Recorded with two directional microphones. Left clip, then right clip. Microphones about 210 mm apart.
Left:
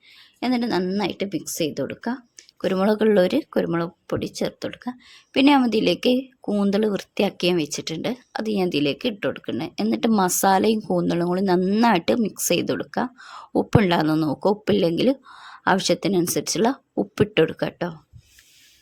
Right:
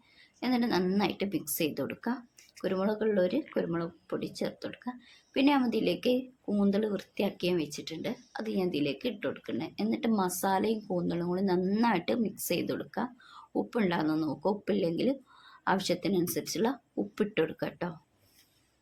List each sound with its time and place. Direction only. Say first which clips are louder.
0.3 s speech: left 6 dB; 40° left (ahead or behind)
2.6 s speech: left 10 dB; 45° left (ahead or behind)